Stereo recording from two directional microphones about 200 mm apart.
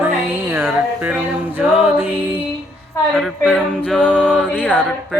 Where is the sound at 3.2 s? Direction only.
5° right (ahead or behind).